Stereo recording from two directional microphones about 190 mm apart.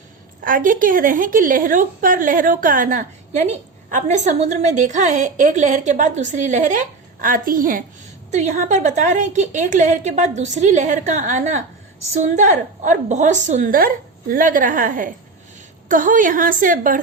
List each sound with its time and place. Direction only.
0.4 s a woman's voice: 45° right (ahead or behind)